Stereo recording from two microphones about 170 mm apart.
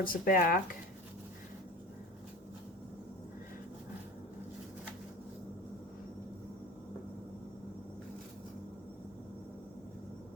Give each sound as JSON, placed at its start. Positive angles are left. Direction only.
{"t": 0.0, "sound": "speech", "side_deg": 55}